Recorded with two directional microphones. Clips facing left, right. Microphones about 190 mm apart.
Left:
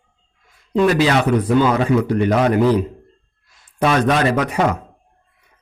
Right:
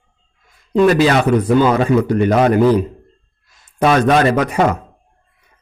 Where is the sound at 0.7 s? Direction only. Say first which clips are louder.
Right 3 dB; 45° right (ahead or behind).